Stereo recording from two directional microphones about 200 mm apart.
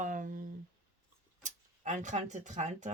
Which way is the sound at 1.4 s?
40° right (ahead or behind).